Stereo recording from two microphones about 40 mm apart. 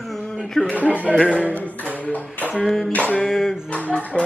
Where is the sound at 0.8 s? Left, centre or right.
Right.